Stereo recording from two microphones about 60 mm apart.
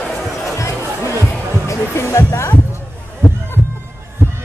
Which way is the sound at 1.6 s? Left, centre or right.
Left.